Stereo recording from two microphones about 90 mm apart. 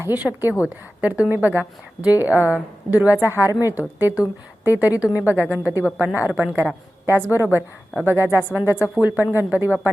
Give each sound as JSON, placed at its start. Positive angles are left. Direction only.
{"t": 0.1, "sound": "a woman's voice", "side_deg": -20}